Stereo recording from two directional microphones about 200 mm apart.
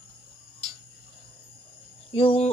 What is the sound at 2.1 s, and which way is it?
Speech, 30° left (ahead or behind).